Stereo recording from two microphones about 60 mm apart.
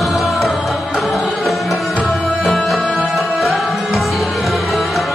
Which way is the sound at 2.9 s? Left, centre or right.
Centre.